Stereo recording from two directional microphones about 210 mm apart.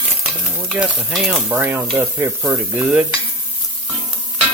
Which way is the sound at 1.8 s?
10° right (ahead or behind).